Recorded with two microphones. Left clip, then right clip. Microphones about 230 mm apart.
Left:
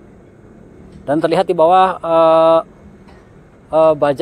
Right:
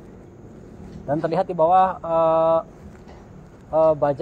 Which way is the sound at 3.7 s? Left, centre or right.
Left.